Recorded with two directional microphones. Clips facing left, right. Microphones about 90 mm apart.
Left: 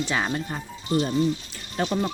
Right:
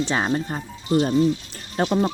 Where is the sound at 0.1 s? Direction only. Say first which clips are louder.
Right 4 dB; 30° right (ahead or behind).